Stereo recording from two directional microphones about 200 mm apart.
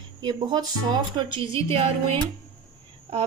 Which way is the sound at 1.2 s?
25° right (ahead or behind).